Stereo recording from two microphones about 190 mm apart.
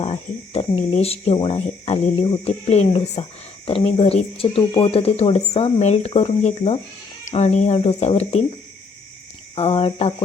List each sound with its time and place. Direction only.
0.0 s speech: 35° left (ahead or behind)
9.6 s speech: 30° left (ahead or behind)